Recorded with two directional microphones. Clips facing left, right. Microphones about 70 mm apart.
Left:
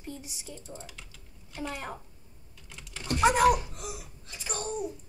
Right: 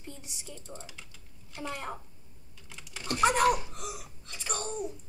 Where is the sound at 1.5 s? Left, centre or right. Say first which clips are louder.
Left 1 dB; centre.